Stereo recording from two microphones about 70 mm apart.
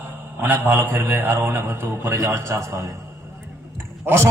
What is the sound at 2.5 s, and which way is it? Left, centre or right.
Speech, right.